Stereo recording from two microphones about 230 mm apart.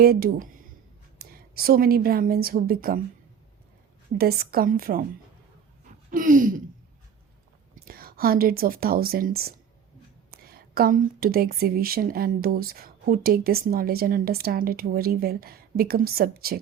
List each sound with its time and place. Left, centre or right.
0.0 s a woman's voice: right
4.2 s a woman's voice: right
5.8 s a sound: right
7.9 s a woman's voice: right